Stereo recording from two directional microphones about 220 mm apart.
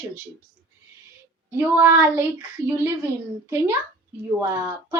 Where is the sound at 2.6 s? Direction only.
15° left (ahead or behind).